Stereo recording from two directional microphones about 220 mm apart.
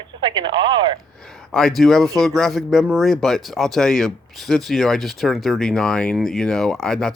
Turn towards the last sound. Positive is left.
turn(degrees=0)  # may be behind; listen again after turning